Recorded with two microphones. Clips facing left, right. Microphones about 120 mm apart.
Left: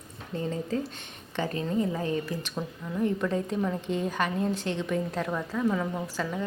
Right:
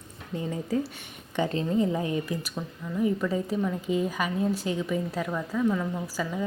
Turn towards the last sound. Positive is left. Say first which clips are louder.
# right 1 dB
turn(degrees=-5)  # may be behind; listen again after turning